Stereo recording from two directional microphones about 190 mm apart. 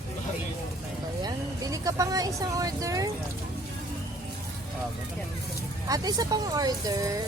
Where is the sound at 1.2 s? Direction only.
20° right (ahead or behind).